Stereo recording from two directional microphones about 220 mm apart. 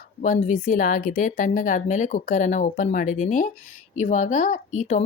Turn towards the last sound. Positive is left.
turn(degrees=35)  # may be behind; listen again after turning